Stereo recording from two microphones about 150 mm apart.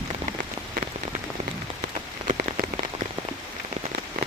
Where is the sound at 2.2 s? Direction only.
60° right (ahead or behind).